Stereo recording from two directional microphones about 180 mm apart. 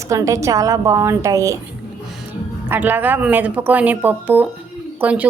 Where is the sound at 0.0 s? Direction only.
15° right (ahead or behind).